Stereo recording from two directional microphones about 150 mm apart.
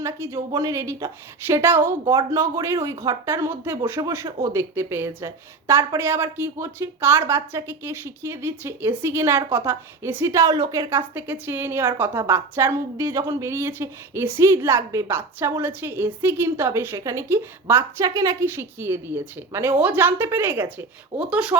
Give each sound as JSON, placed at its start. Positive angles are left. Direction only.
{"t": 0.0, "sound": "a woman's voice", "side_deg": -20}